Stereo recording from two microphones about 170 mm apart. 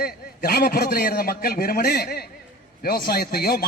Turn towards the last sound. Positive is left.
turn(degrees=65)  # may be behind; listen again after turning